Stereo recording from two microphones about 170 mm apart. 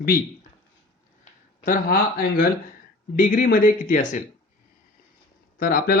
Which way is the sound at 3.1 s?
55° left (ahead or behind).